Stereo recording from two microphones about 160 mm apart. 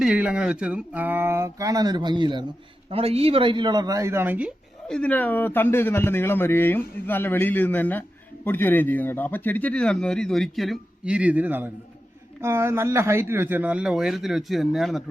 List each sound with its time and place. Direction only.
0.0 s speech: 5° right (ahead or behind)
4.9 s a man's voice: 10° left (ahead or behind)